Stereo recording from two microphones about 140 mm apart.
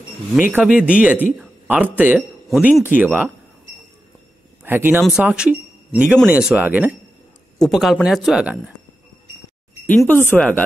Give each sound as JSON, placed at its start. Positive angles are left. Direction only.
{"t": 0.4, "sound": "speech", "side_deg": -10}
{"t": 2.5, "sound": "speech", "side_deg": 0}
{"t": 2.8, "sound": "speech", "side_deg": -15}
{"t": 4.6, "sound": "speech", "side_deg": -15}
{"t": 7.5, "sound": "speech", "side_deg": 0}
{"t": 9.8, "sound": "speech", "side_deg": 10}